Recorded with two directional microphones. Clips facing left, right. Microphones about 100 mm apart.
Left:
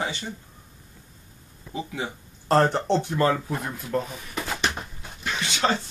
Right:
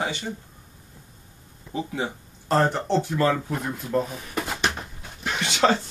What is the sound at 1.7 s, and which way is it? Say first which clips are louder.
Speech: right 3 dB; 25° right (ahead or behind).